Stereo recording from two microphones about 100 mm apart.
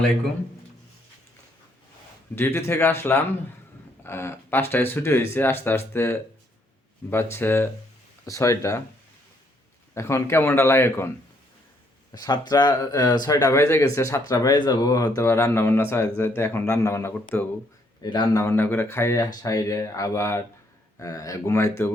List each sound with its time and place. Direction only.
2.3 s speech: 25° left (ahead or behind)
9.9 s speech: 30° left (ahead or behind)
12.1 s speech: 45° left (ahead or behind)
14.3 s speech: 40° left (ahead or behind); by 17.5 s 20° left (ahead or behind)
18.0 s a man's voice: 45° left (ahead or behind)
18.4 s speech: 25° left (ahead or behind)